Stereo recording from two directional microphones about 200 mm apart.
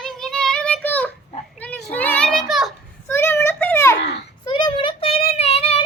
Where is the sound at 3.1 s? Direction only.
10° left (ahead or behind).